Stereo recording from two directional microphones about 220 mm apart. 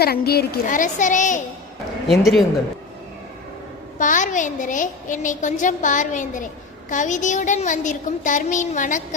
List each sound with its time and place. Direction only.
0.0 s a woman's voice: 45° left (ahead or behind)
2.0 s speech: centre (ahead or behind)
3.9 s a woman's voice: 35° left (ahead or behind)